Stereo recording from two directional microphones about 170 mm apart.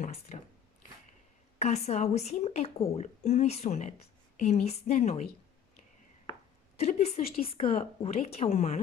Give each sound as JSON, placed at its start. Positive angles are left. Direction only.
{"t": 0.0, "sound": "a woman's voice", "side_deg": 40}
{"t": 1.6, "sound": "a woman's voice", "side_deg": 40}
{"t": 6.8, "sound": "a woman's voice", "side_deg": 40}